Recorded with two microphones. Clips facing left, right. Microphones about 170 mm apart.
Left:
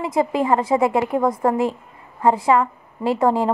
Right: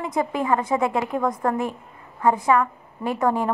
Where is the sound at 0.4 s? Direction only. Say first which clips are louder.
Left 3 dB; 20° left (ahead or behind).